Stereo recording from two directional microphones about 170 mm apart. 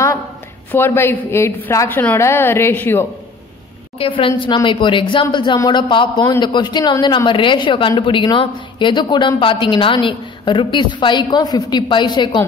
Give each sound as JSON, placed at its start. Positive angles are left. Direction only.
{"t": 0.7, "sound": "a woman's voice", "side_deg": 10}
{"t": 4.0, "sound": "a woman's voice", "side_deg": 30}